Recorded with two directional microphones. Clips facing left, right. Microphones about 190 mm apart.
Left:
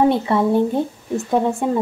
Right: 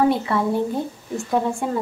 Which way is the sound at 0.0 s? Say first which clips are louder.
Left 3 dB; 25° left (ahead or behind).